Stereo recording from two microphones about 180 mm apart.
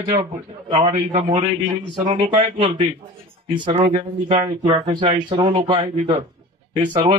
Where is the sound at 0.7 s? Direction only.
25° right (ahead or behind).